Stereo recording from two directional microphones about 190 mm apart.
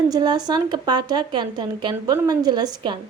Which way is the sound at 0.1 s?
20° right (ahead or behind).